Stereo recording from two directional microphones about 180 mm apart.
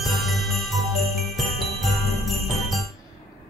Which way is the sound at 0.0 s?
Centre (ahead or behind).